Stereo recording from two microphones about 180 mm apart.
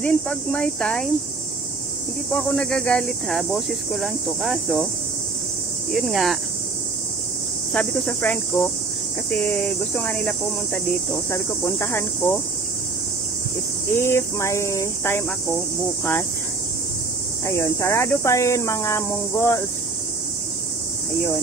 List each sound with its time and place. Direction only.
0.0 s speech: 5° left (ahead or behind)
2.3 s speech: 5° left (ahead or behind)
5.9 s speech: centre (ahead or behind)
7.7 s speech: 5° left (ahead or behind)
13.9 s speech: 15° left (ahead or behind)
17.5 s speech: 15° left (ahead or behind)